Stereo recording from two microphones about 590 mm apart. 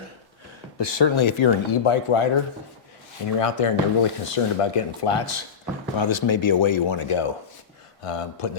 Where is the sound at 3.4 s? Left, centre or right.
Left.